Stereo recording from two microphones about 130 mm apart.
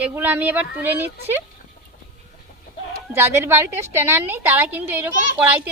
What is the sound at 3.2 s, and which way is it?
A woman's voice, 20° right (ahead or behind).